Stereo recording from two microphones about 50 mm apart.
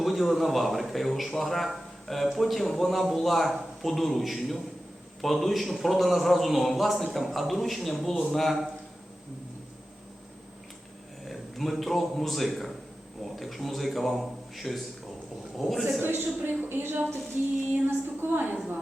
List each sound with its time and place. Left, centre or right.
0.0 s speech: centre
11.3 s a man's voice: centre
16.0 s speech: right